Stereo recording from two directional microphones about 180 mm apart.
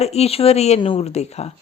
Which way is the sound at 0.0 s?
35° left (ahead or behind).